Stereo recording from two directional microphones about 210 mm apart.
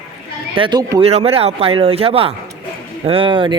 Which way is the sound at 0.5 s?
20° right (ahead or behind).